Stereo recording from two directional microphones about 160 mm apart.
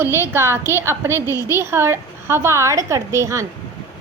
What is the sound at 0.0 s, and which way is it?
A woman's voice, 15° right (ahead or behind).